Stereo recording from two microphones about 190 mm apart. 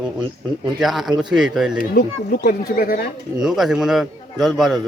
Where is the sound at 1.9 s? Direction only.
50° left (ahead or behind).